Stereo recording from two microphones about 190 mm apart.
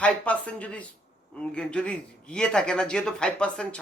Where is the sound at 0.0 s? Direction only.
5° left (ahead or behind).